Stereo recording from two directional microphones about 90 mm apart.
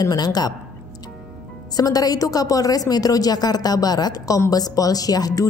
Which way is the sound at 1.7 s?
45° left (ahead or behind).